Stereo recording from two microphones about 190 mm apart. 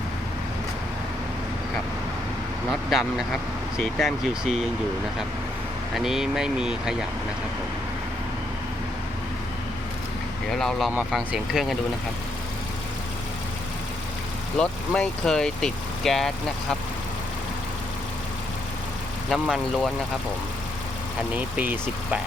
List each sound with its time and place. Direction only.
2.6 s speech: centre (ahead or behind)
5.9 s speech: centre (ahead or behind)
10.5 s speech: centre (ahead or behind)
14.6 s speech: 5° left (ahead or behind)
19.3 s speech: centre (ahead or behind)
21.3 s speech: 10° right (ahead or behind)